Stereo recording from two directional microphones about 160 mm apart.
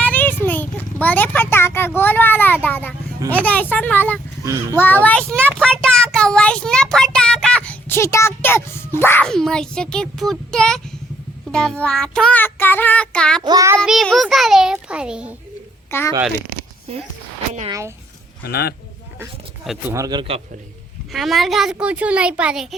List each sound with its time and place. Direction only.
0.0 s a sound: 10° left (ahead or behind)
3.4 s child singing: 10° left (ahead or behind)
4.4 s child singing: 20° right (ahead or behind)
4.8 s child singing: 10° left (ahead or behind)
9.0 s a child's voice: 15° left (ahead or behind)
11.5 s child singing: 5° left (ahead or behind)
13.4 s child singing: 25° right (ahead or behind)
13.8 s a child's voice: centre (ahead or behind)
15.9 s speech: 15° left (ahead or behind)
17.7 s child singing: 20° right (ahead or behind)
18.4 s speech: 75° left (ahead or behind)
19.9 s child singing: 25° right (ahead or behind)
21.1 s a child's voice: centre (ahead or behind)